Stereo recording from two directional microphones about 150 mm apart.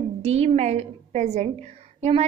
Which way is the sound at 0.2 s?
45° right (ahead or behind).